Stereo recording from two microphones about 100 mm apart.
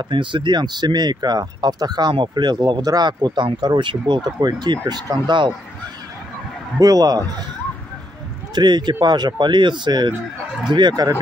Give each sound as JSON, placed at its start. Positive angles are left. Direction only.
{"t": 0.1, "sound": "speech", "side_deg": -55}
{"t": 6.8, "sound": "speech", "side_deg": -40}
{"t": 8.5, "sound": "speech", "side_deg": -45}